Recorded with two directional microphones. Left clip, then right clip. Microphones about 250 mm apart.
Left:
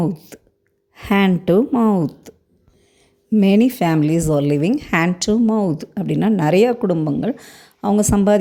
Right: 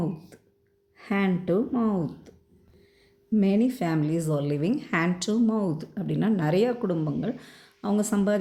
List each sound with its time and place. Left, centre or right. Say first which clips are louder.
0.0 s speech: left 10 dB; left
3.3 s a woman's voice: left 9 dB; left